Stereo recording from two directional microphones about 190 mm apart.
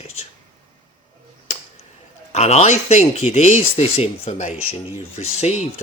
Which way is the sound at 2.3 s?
35° left (ahead or behind).